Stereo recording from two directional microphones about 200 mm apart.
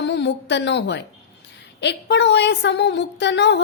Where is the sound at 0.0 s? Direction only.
60° left (ahead or behind).